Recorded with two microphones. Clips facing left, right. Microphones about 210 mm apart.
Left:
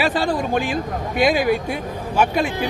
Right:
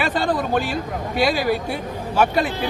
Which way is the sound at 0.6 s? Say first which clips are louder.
Left 2 dB; 40° right (ahead or behind).